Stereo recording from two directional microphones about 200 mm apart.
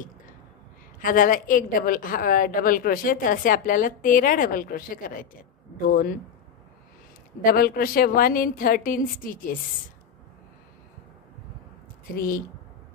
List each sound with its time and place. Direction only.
0.9 s a woman's voice: 45° left (ahead or behind)
7.4 s a woman's voice: 50° left (ahead or behind)
12.2 s a woman's voice: 45° left (ahead or behind)